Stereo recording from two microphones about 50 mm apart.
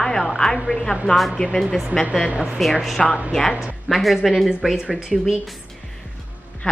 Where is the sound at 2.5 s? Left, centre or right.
Centre.